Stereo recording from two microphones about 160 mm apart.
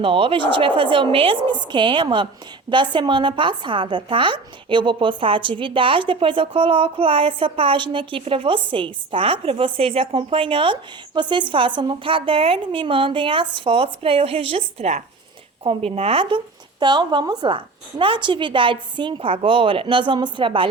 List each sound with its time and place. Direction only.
0.0 s a woman's voice: 35° right (ahead or behind)